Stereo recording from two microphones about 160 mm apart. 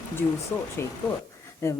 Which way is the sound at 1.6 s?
15° left (ahead or behind).